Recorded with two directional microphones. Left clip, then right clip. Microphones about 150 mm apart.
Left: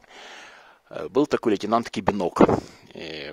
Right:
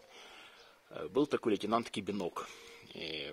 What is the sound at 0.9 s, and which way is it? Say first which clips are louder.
Speech: left 10 dB; 45° left (ahead or behind).